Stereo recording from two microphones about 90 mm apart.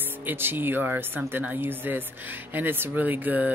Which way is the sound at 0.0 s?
20° right (ahead or behind).